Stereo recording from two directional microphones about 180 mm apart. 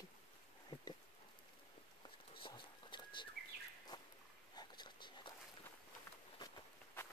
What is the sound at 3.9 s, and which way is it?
Dog, 25° left (ahead or behind).